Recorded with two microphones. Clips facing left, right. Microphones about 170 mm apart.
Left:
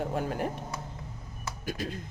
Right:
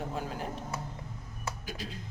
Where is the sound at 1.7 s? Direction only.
55° left (ahead or behind).